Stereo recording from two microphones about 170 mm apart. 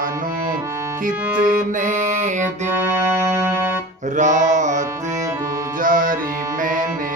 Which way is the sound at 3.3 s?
15° right (ahead or behind).